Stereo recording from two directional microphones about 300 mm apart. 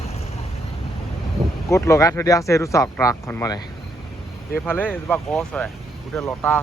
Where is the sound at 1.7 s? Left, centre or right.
Centre.